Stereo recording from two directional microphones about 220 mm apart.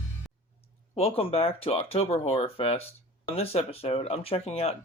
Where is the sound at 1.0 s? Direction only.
25° left (ahead or behind).